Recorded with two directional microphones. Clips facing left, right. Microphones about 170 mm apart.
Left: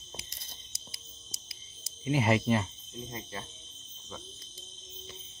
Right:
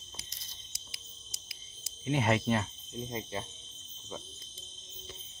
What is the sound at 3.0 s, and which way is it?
Speech, 20° right (ahead or behind).